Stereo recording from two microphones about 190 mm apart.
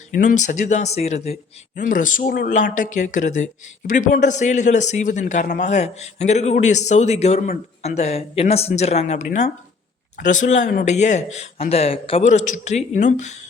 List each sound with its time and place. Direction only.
0.1 s a man's voice: 45° left (ahead or behind)